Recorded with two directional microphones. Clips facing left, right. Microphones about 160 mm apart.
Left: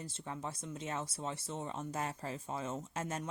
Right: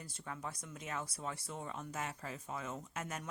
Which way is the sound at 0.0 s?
25° left (ahead or behind).